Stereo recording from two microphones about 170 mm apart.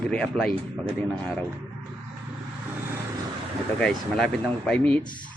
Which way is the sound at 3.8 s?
5° left (ahead or behind).